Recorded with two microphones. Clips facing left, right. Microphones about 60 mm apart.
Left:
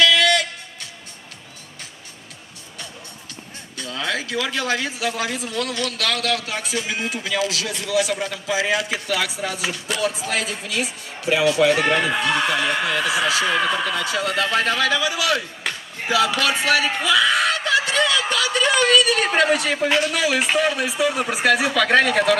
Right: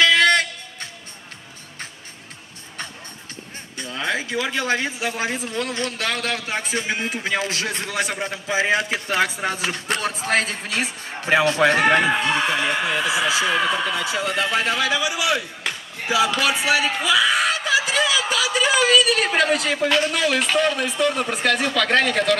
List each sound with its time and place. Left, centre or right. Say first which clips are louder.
0.0 s music: right 1 dB; right
3.7 s a man's voice: right 1 dB; right
11.8 s a man's voice: right 2 dB; centre
14.0 s a man's voice: left 1 dB; centre
15.7 s a sound: left 1 dB; centre
20.0 s speech: even; centre